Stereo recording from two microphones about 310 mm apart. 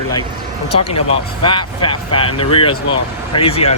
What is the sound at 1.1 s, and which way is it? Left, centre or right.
Speech, centre.